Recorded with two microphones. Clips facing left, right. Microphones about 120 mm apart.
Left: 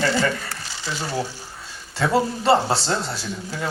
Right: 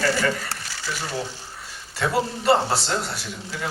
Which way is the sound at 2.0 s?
25° left (ahead or behind).